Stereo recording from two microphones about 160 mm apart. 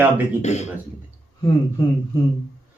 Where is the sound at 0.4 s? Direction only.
45° left (ahead or behind).